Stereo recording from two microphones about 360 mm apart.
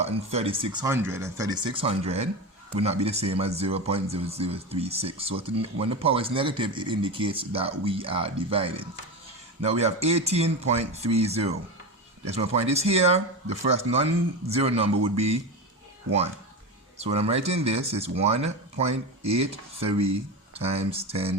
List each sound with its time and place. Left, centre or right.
0.0 s speech: centre
12.5 s speech: centre
17.0 s speech: centre